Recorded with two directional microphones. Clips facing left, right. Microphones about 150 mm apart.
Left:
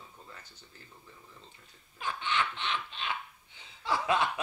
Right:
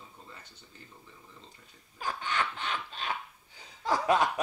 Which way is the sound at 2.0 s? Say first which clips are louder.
Even; 40° right (ahead or behind).